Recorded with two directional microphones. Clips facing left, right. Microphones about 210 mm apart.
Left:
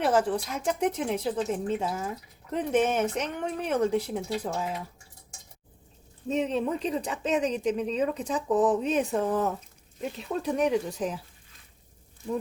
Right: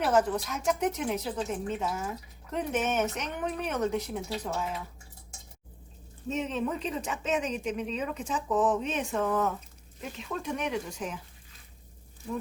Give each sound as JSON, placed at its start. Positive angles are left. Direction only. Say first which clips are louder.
{"t": 0.0, "sound": "speech", "louder": "left 1 dB", "side_deg": 30}
{"t": 6.2, "sound": "speech", "louder": "left 4 dB", "side_deg": 35}